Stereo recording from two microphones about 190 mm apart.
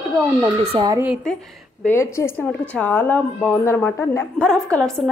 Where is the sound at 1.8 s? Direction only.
15° left (ahead or behind).